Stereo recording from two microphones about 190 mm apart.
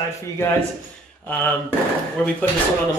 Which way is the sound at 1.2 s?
10° left (ahead or behind).